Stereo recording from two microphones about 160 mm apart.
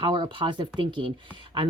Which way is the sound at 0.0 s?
30° right (ahead or behind).